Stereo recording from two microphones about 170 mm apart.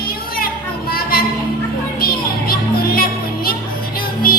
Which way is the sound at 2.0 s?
60° left (ahead or behind).